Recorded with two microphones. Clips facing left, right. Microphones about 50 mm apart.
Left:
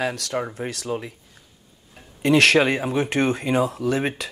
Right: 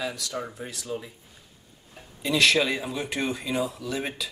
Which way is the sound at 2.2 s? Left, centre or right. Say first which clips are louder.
Left 6 dB; left.